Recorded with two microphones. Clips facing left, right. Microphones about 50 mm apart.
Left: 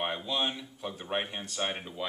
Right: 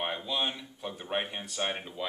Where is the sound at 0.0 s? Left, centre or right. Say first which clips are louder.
Left 1 dB; centre.